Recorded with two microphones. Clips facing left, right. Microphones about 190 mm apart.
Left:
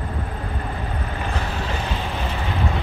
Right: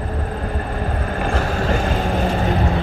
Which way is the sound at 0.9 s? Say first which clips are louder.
Right 6 dB; 45° right (ahead or behind).